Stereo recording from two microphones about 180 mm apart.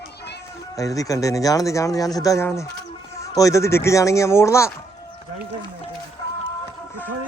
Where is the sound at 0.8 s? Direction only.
20° left (ahead or behind).